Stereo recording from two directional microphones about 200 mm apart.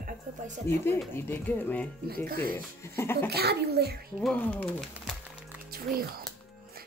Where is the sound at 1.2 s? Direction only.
10° left (ahead or behind).